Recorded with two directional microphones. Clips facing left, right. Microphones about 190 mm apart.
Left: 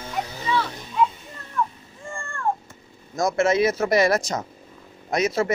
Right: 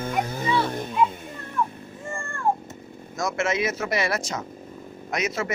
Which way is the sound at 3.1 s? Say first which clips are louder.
Left 5 dB; 35° left (ahead or behind).